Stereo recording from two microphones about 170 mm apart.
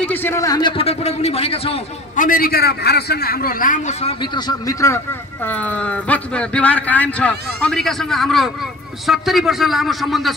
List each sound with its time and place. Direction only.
0.0 s a man's voice: 10° left (ahead or behind); by 1.8 s 35° left (ahead or behind)
2.1 s a man's voice: 55° left (ahead or behind)
4.2 s a man's voice: 20° left (ahead or behind); by 10.3 s centre (ahead or behind)